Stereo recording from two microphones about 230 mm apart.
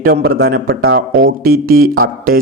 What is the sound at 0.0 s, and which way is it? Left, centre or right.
Speech, right.